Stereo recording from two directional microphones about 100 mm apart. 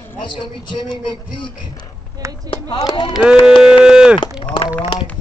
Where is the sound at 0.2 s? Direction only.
50° left (ahead or behind).